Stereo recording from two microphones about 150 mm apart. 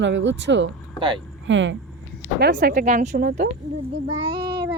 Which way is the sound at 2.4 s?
75° right (ahead or behind).